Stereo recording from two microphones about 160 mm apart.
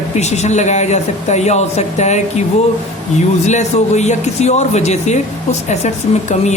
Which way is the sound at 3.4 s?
45° left (ahead or behind).